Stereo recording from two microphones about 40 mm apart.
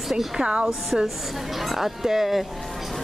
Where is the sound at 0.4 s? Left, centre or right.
Right.